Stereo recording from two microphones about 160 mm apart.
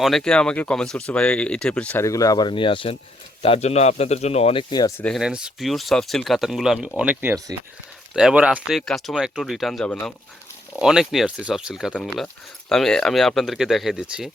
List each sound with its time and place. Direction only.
0.0 s speech: 5° left (ahead or behind); by 4.6 s 40° left (ahead or behind)
4.9 s speech: 5° left (ahead or behind)
5.2 s speech: 5° right (ahead or behind)
8.1 s speech: 5° right (ahead or behind)